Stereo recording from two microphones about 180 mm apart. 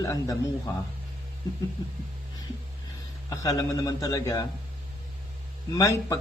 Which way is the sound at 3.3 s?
20° left (ahead or behind).